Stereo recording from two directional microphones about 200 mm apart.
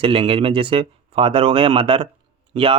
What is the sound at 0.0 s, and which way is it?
Speech, 25° right (ahead or behind).